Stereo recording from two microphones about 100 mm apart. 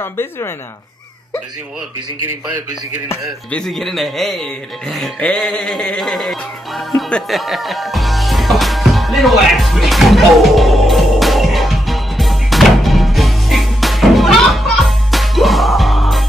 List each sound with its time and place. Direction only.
0.0 s speech: 25° left (ahead or behind)
3.5 s speech: 5° left (ahead or behind)
7.0 s music: 5° left (ahead or behind)